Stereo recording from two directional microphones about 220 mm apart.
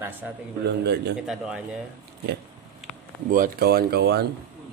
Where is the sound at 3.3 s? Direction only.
40° right (ahead or behind).